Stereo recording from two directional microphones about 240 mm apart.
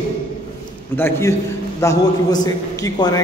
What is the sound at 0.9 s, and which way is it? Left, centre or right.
A man's voice, centre.